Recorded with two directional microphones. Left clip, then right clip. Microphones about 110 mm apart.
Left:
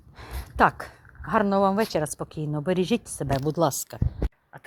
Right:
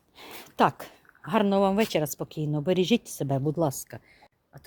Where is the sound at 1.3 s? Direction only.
35° right (ahead or behind).